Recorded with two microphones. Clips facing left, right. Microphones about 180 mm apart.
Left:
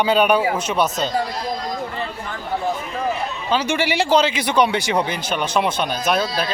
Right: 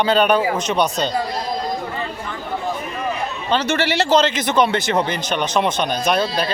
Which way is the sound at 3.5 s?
10° left (ahead or behind).